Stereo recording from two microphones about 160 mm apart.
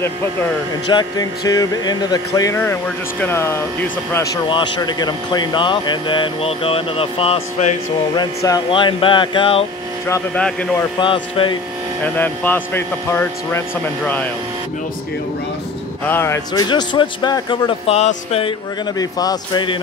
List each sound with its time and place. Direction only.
0.8 s speech: 25° left (ahead or behind)
8.5 s a sound: 25° left (ahead or behind)
10.3 s speech: 10° left (ahead or behind)
11.0 s a sound: 30° left (ahead or behind)
12.0 s speech: 10° left (ahead or behind)
16.1 s speech: 15° left (ahead or behind)
16.5 s speech: 25° left (ahead or behind)
18.9 s speech: 25° left (ahead or behind)